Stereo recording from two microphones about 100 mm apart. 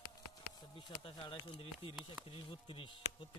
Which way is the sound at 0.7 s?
55° left (ahead or behind).